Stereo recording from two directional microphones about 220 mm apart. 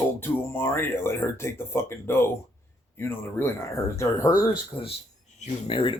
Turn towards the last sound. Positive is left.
turn(degrees=25)  # may be behind; listen again after turning